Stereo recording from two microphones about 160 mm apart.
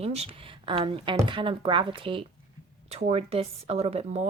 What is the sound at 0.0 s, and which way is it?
Speech, 40° right (ahead or behind).